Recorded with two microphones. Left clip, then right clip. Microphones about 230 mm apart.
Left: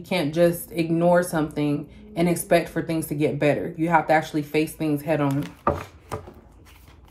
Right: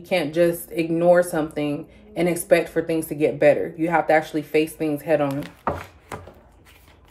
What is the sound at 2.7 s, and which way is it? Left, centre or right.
Chopping, left.